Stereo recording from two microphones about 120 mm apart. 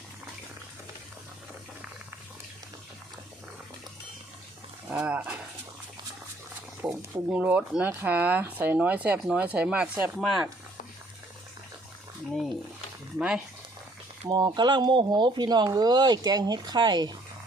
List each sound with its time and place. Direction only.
4.9 s a sound: 10° right (ahead or behind)
6.8 s speech: 10° right (ahead or behind)
13.1 s speech: 10° right (ahead or behind)
14.3 s speech: 35° right (ahead or behind)